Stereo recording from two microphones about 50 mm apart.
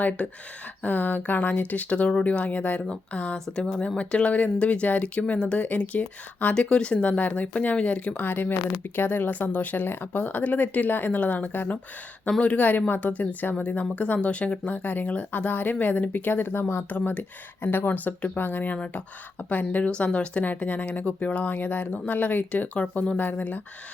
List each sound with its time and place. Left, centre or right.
0.8 s speech: left
8.1 s speech: left